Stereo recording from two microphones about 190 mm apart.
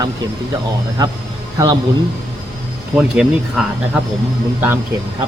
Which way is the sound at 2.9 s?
5° right (ahead or behind).